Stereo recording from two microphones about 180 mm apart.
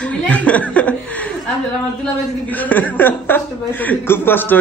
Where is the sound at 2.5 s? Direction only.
10° left (ahead or behind).